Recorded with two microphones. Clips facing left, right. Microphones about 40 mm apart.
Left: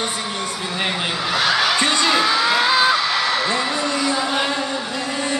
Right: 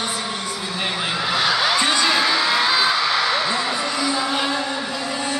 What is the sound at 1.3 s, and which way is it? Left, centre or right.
Speech, centre.